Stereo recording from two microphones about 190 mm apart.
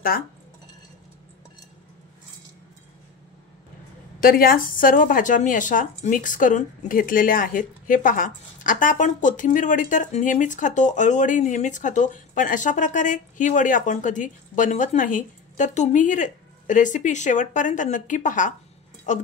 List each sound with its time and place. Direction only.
4.2 s speech: 50° left (ahead or behind)